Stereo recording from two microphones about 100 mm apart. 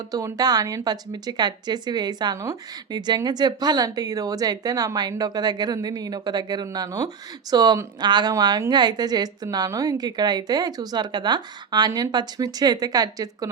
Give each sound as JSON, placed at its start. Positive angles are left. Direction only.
{"t": 0.3, "sound": "a woman's voice", "side_deg": -40}